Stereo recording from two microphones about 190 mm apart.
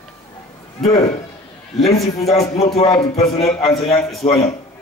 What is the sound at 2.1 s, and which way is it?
A man's voice, 30° left (ahead or behind).